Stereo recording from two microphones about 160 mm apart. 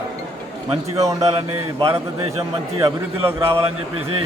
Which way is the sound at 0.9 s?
20° right (ahead or behind).